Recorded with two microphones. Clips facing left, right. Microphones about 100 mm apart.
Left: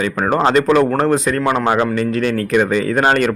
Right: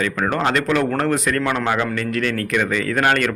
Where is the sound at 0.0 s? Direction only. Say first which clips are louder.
Left 4 dB; 25° left (ahead or behind).